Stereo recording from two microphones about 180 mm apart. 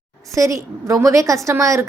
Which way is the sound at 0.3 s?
15° right (ahead or behind).